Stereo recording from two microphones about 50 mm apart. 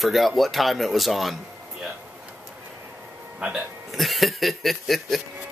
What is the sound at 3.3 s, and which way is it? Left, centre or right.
Speech, right.